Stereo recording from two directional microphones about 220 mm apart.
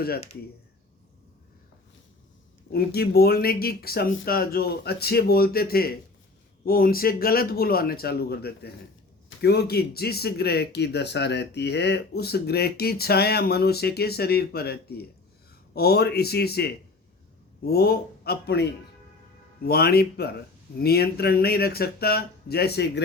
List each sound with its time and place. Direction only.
2.7 s speech: 45° left (ahead or behind)